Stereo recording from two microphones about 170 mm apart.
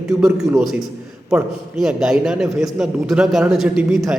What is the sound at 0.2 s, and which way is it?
A man's voice, 5° right (ahead or behind).